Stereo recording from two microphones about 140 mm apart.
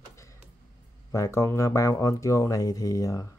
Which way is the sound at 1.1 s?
20° left (ahead or behind).